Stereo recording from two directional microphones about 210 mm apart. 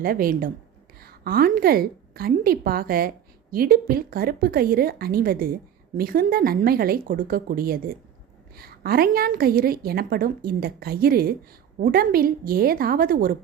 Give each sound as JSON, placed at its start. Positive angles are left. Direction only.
{"t": 0.0, "sound": "a woman's voice", "side_deg": -45}